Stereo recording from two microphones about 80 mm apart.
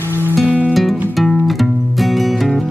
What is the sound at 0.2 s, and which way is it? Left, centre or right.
Music, right.